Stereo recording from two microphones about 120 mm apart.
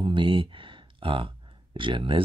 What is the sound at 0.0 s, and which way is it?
Speech, 45° right (ahead or behind).